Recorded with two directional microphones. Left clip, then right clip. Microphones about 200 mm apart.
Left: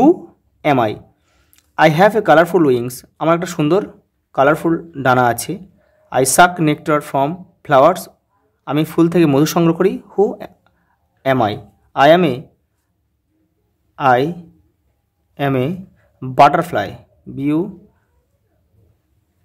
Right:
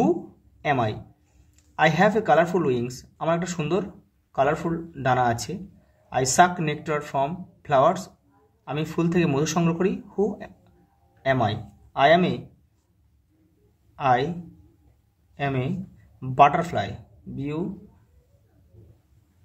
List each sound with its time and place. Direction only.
0.6 s a man's voice: 50° left (ahead or behind)
13.9 s a man's voice: 50° left (ahead or behind)
15.3 s a man's voice: 55° left (ahead or behind)